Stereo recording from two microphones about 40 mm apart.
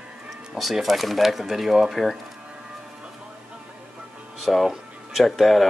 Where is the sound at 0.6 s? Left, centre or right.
Centre.